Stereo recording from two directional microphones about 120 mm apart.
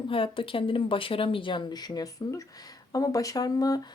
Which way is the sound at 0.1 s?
50° left (ahead or behind).